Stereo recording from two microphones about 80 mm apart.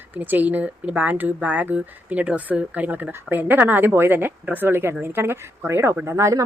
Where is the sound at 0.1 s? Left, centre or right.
Right.